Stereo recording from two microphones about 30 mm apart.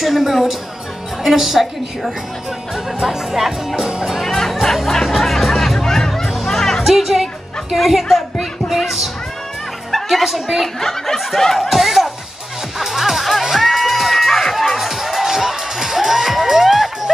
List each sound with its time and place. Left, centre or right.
0.0 s a woman's voice: centre
3.0 s speech: centre
3.3 s a woman's voice: centre
4.8 s music: centre
6.8 s music: centre
7.7 s a woman's voice: centre
10.2 s a woman's voice: centre
10.8 s snicker: centre
11.7 s speech: centre
12.7 s music: centre
14.9 s music: centre